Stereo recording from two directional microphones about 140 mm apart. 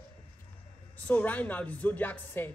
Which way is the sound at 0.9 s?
10° left (ahead or behind).